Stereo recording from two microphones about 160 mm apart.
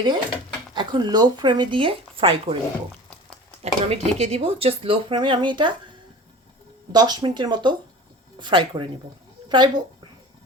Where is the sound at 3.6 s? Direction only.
40° right (ahead or behind).